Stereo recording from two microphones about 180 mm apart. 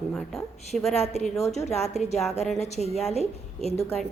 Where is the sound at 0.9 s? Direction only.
35° left (ahead or behind).